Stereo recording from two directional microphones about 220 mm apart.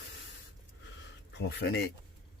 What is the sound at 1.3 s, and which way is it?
Speech, 50° left (ahead or behind).